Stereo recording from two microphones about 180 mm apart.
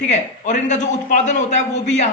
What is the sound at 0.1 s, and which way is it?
A man's voice, 40° left (ahead or behind).